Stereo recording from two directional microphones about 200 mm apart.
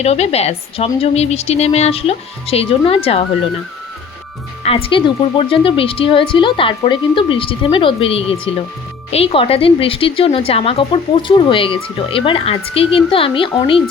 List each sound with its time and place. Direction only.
0.0 s a woman's voice: 30° left (ahead or behind)
4.6 s speech: 30° left (ahead or behind)